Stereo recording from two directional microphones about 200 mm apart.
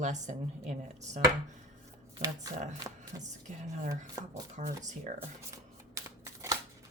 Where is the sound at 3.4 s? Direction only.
40° right (ahead or behind).